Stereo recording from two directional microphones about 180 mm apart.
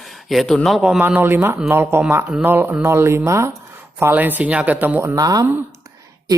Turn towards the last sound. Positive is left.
turn(degrees=-20)  # may be behind; listen again after turning